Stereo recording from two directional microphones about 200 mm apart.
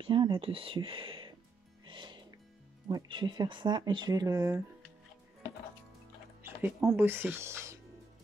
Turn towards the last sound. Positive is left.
turn(degrees=-15)  # may be behind; listen again after turning